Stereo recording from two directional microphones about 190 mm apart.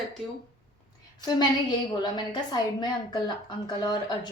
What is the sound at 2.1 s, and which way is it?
A woman's voice, 25° left (ahead or behind).